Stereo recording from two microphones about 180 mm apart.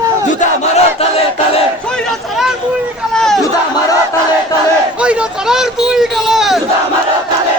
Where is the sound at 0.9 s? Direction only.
35° left (ahead or behind).